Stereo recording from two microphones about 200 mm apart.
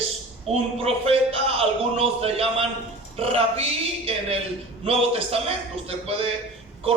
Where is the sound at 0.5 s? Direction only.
30° right (ahead or behind).